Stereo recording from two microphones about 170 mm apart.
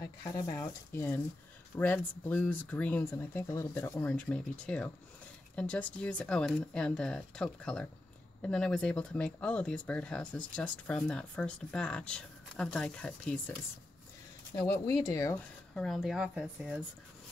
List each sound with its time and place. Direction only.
0.2 s speech: 15° left (ahead or behind)
14.5 s speech: 15° left (ahead or behind)
15.7 s speech: centre (ahead or behind)